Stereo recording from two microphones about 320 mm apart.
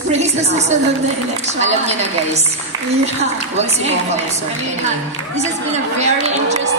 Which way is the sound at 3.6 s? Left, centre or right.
Centre.